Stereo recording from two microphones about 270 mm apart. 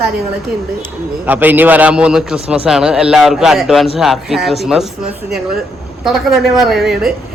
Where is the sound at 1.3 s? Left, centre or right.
Centre.